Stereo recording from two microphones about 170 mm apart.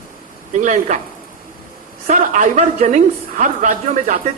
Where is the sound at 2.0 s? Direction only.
50° right (ahead or behind).